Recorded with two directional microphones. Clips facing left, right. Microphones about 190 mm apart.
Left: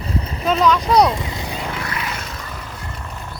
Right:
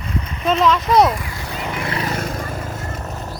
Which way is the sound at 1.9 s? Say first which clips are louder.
Right 5 dB; 40° right (ahead or behind).